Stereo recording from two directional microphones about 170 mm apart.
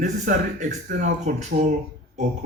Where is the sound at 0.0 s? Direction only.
45° right (ahead or behind).